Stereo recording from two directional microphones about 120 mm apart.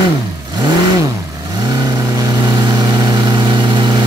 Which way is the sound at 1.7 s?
35° right (ahead or behind).